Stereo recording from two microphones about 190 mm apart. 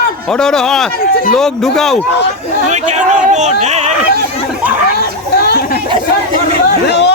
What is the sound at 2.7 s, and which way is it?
Speech, 40° right (ahead or behind).